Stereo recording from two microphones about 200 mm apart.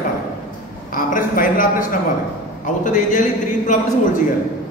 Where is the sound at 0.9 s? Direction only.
45° left (ahead or behind).